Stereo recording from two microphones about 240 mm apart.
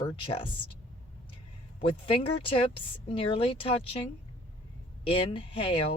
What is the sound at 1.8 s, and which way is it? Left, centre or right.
Speech, left.